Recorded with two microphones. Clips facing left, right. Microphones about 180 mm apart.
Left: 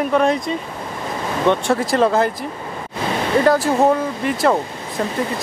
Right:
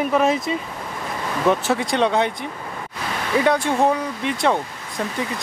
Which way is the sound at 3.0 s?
25° left (ahead or behind).